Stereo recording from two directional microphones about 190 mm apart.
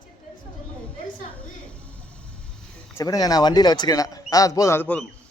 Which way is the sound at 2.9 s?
20° left (ahead or behind).